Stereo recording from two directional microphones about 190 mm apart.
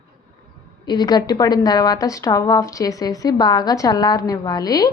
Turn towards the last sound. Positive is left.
turn(degrees=20)  # may be behind; listen again after turning